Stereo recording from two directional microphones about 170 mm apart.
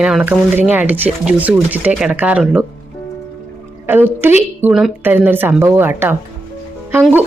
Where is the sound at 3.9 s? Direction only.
10° right (ahead or behind).